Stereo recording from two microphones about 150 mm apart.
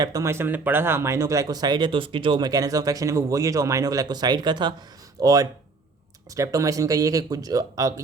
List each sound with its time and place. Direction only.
0.0 s speech: 20° right (ahead or behind)